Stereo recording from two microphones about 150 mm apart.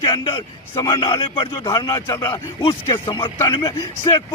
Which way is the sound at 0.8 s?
35° left (ahead or behind).